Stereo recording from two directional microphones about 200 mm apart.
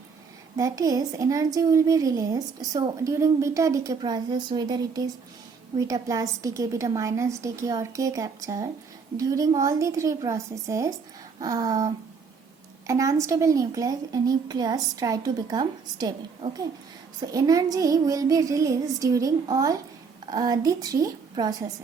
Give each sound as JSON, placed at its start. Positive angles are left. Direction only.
{"t": 0.5, "sound": "a woman's voice", "side_deg": -20}
{"t": 12.9, "sound": "a woman's voice", "side_deg": -15}